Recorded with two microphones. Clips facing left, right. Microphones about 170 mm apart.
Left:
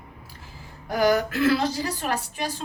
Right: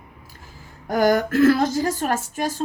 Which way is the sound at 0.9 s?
50° right (ahead or behind).